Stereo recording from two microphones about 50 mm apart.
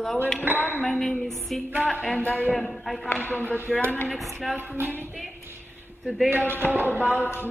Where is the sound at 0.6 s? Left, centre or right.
Left.